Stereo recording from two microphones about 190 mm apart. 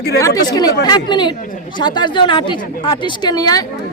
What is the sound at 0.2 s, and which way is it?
Speech, 20° left (ahead or behind).